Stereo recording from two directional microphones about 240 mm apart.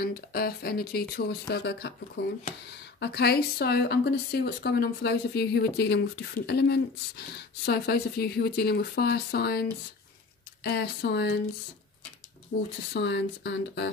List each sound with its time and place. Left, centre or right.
0.0 s speech: left
3.0 s speech: left
12.5 s speech: left
12.9 s speech: left